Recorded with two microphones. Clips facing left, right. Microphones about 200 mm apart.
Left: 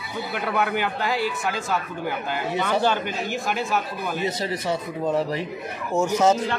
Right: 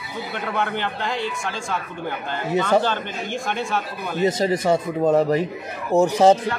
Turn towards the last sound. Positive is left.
turn(degrees=-35)  # may be behind; listen again after turning